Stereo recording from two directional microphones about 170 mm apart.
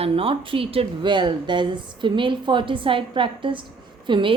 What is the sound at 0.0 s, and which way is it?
Speech, 35° right (ahead or behind).